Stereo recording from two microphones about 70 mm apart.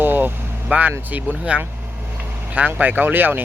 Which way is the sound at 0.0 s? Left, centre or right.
Right.